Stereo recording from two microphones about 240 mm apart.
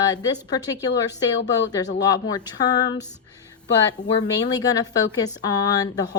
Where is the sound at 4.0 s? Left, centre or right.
Centre.